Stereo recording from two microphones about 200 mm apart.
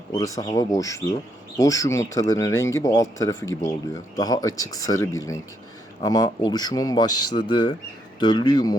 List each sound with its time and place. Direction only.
0.3 s speech: 15° left (ahead or behind)